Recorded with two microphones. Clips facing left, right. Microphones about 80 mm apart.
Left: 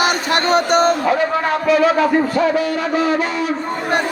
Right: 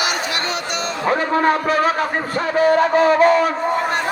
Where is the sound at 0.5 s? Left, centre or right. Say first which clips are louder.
Left 11 dB; left.